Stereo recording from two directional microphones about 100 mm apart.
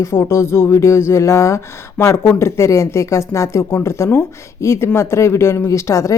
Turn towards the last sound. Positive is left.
turn(degrees=30)  # may be behind; listen again after turning